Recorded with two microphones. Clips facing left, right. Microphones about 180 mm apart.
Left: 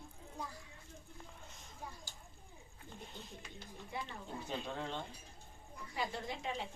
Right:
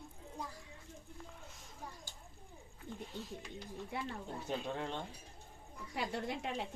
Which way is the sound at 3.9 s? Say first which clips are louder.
Right 2 dB; 65° right (ahead or behind).